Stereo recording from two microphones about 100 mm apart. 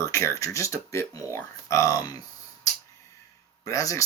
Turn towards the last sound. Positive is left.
turn(degrees=30)  # may be behind; listen again after turning